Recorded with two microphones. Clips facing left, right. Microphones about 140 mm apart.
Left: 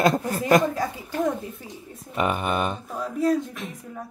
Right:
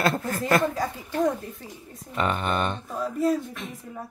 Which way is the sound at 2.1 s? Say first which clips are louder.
Left 1 dB; 10° left (ahead or behind).